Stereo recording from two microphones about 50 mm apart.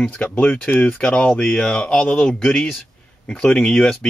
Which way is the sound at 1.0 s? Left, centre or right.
Left.